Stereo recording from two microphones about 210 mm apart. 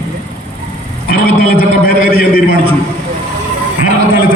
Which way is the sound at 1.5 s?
45° left (ahead or behind).